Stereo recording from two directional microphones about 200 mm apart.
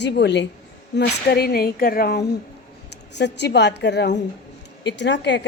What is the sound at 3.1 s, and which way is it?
A woman's voice, 60° left (ahead or behind).